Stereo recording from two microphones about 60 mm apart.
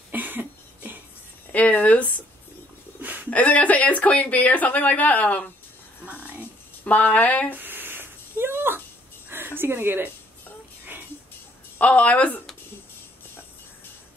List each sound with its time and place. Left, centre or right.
0.1 s cough: right
1.5 s speech: left
3.0 s a sound: right
3.3 s speech: left
6.0 s music: right
6.8 s speech: left
7.5 s a sound: right
11.8 s speech: left